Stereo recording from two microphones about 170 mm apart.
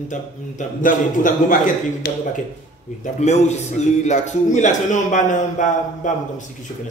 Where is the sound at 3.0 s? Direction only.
45° left (ahead or behind).